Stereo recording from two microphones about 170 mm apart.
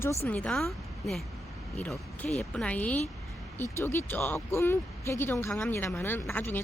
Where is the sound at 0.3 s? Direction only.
5° left (ahead or behind).